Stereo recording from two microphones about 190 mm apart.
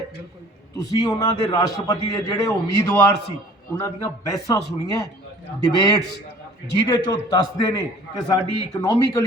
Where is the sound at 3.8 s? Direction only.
15° left (ahead or behind).